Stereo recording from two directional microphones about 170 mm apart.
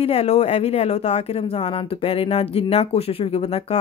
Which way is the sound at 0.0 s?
35° left (ahead or behind).